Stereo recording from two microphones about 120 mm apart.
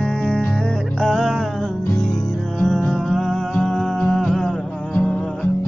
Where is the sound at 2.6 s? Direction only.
5° left (ahead or behind).